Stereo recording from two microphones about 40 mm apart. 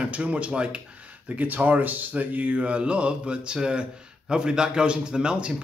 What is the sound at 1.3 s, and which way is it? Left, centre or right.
Speech, right.